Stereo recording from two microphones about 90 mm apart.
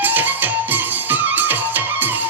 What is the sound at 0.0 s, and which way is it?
Music, 20° right (ahead or behind).